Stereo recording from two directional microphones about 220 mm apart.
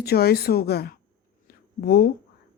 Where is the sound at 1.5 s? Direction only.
45° left (ahead or behind).